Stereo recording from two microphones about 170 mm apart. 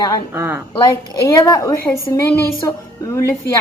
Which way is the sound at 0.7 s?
20° left (ahead or behind).